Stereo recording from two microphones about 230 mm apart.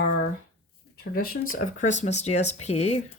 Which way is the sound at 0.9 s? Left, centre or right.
Left.